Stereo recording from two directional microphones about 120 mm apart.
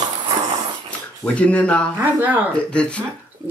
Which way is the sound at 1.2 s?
10° left (ahead or behind).